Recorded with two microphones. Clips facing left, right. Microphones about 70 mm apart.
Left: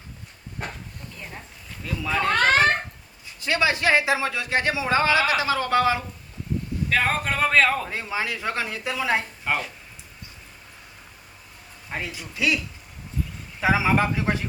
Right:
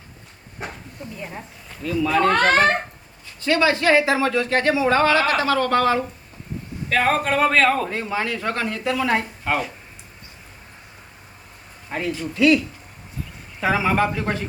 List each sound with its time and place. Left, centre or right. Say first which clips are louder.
1.0 s speech: right 7 dB; centre
1.8 s a man's voice: right 6 dB; centre
3.4 s a man's voice: right 4 dB; centre
11.9 s a man's voice: right 7 dB; centre
13.6 s speech: right 1 dB; centre